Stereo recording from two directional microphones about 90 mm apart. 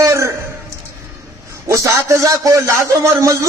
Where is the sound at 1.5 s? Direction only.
35° right (ahead or behind).